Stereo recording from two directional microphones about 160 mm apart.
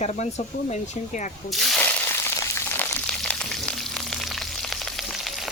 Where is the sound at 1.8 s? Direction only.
15° left (ahead or behind).